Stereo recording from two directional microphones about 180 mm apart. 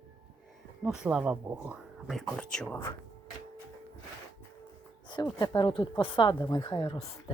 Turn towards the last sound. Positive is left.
turn(degrees=25)  # may be behind; listen again after turning